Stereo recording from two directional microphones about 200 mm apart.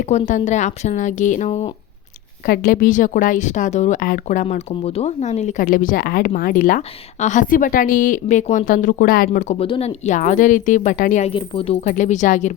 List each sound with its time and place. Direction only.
0.0 s speech: 35° left (ahead or behind)
2.5 s speech: 45° left (ahead or behind)